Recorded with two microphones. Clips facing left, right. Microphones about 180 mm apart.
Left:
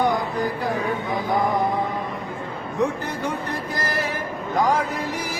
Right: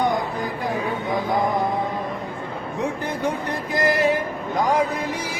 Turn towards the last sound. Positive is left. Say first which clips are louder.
# right 7 dB
turn(degrees=-20)  # may be behind; listen again after turning